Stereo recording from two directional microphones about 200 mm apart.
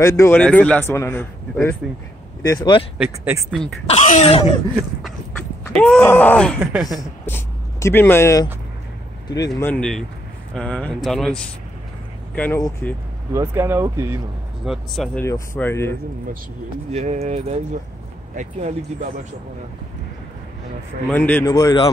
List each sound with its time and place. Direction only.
0.0 s a man's voice: 15° left (ahead or behind)
3.0 s speech: 10° right (ahead or behind)
3.8 s speech: 35° left (ahead or behind)
5.7 s a man's voice: 5° left (ahead or behind)
7.0 s a man's voice: 10° left (ahead or behind)
12.4 s a man's voice: 10° left (ahead or behind)
13.3 s speech: 15° right (ahead or behind)
14.6 s speech: centre (ahead or behind)
15.2 s a man's voice: 15° left (ahead or behind)
16.9 s speech: 35° right (ahead or behind)
21.1 s a man's voice: 10° left (ahead or behind)